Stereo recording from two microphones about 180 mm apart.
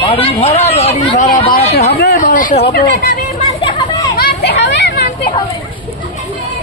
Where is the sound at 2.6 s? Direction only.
65° left (ahead or behind).